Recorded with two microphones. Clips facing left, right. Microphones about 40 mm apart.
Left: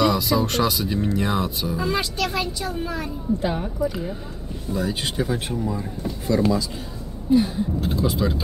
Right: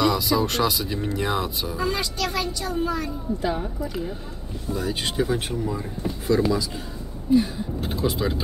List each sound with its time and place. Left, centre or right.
0.0 s speech: centre
2.0 s a woman's voice: centre
3.8 s speech: centre
7.8 s speech: centre